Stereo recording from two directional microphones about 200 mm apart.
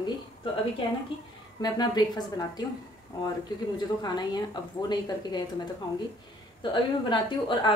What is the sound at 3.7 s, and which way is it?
A woman's voice, 20° left (ahead or behind).